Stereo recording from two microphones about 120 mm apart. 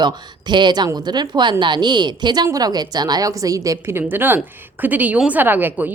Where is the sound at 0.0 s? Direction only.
40° right (ahead or behind).